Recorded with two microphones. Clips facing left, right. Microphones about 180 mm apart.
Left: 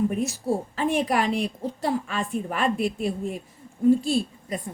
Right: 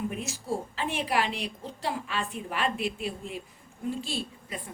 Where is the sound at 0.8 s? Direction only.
45° left (ahead or behind).